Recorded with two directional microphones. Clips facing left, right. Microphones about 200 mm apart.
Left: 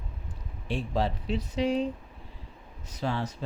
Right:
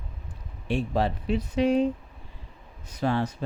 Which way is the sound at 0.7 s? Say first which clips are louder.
Right 3 dB; 60° right (ahead or behind).